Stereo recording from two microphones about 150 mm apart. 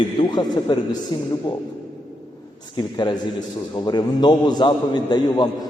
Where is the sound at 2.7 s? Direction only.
30° left (ahead or behind).